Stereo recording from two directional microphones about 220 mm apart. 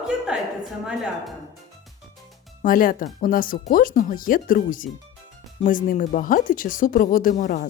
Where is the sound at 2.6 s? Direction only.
40° left (ahead or behind).